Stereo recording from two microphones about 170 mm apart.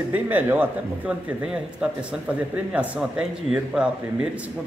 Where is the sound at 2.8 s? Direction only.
5° right (ahead or behind).